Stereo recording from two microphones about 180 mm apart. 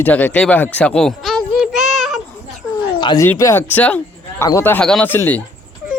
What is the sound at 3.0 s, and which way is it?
Speech, 25° left (ahead or behind).